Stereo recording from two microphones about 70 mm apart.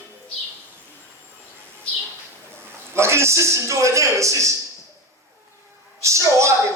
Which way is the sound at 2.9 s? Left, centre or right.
Right.